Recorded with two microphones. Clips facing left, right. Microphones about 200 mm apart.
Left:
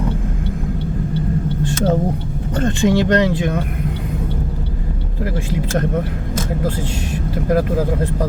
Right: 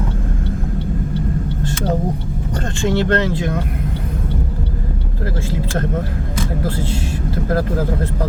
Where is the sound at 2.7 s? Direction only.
15° left (ahead or behind).